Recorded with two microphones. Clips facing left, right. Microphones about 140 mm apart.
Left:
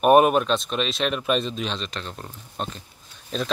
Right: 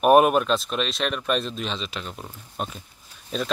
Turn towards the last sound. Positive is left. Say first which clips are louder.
# even
turn(degrees=-5)  # may be behind; listen again after turning